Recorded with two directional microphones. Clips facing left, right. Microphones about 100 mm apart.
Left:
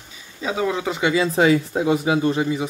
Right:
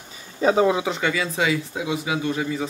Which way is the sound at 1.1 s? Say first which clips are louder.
Left 6 dB; 35° left (ahead or behind).